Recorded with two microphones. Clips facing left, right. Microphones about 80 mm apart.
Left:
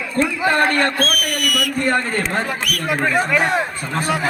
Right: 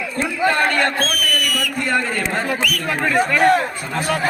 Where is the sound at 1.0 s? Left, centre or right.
Left.